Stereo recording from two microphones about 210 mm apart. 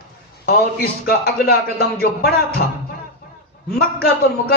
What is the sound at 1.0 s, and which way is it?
Speech, 45° left (ahead or behind).